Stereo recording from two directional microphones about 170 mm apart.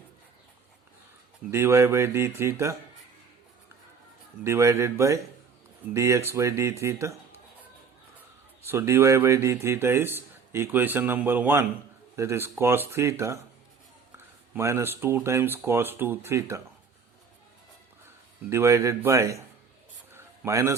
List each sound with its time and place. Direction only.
1.5 s speech: 15° right (ahead or behind)
4.4 s speech: 15° right (ahead or behind)
8.6 s speech: 15° right (ahead or behind)
18.4 s speech: 15° right (ahead or behind)
20.1 s a sound: 15° right (ahead or behind)